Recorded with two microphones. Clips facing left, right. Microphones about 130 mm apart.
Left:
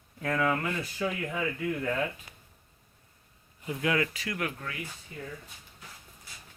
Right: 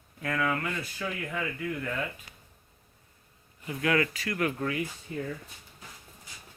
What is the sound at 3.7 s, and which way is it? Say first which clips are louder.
Speech: right 1 dB; 15° left (ahead or behind).